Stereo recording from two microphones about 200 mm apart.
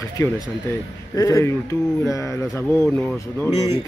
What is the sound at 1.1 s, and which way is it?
Speech, 15° left (ahead or behind).